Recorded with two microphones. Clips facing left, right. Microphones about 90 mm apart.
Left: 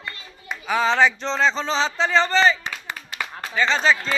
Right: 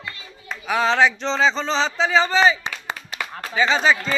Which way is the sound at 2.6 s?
20° right (ahead or behind).